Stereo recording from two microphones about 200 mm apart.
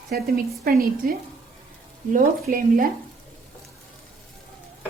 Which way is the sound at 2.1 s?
45° right (ahead or behind).